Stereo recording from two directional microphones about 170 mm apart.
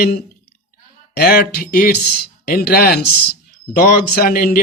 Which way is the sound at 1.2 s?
65° left (ahead or behind).